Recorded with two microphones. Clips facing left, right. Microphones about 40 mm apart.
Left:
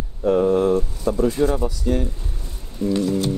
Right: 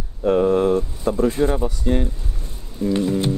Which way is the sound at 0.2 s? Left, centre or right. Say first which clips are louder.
Right 1 dB; centre.